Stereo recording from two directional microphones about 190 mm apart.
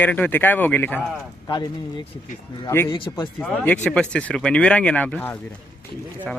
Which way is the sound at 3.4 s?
5° left (ahead or behind).